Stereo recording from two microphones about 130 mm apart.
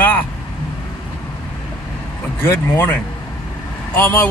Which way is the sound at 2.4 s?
20° left (ahead or behind).